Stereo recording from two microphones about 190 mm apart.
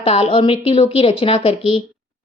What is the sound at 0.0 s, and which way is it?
A woman's voice, 30° left (ahead or behind).